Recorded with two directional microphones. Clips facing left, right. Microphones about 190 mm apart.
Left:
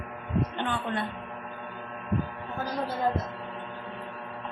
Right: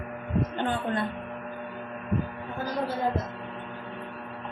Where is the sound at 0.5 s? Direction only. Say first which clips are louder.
Right 2 dB; 40° right (ahead or behind).